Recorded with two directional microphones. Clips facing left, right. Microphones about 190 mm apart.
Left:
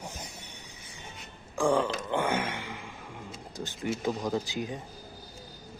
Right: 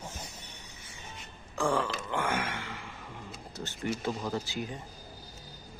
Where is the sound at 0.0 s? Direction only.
15° left (ahead or behind).